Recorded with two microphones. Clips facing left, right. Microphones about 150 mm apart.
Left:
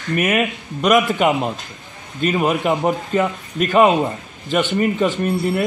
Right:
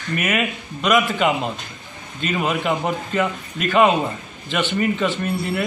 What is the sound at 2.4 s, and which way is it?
Speech, 45° left (ahead or behind).